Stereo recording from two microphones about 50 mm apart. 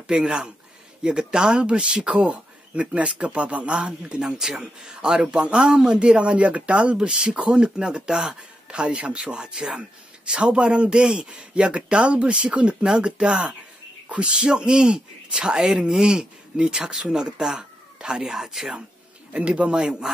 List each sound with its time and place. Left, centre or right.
0.0 s a man's voice: centre
19.3 s a man's voice: right